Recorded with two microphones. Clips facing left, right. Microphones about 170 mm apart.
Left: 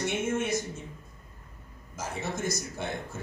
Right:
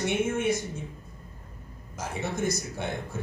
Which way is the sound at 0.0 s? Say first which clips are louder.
Right 3 dB; 55° right (ahead or behind).